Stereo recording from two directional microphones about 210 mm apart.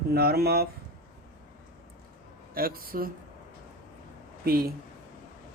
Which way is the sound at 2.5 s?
45° right (ahead or behind).